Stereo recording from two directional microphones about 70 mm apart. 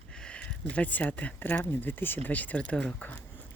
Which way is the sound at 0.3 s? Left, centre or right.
Centre.